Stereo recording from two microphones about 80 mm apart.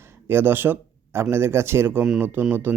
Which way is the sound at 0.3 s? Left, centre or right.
Right.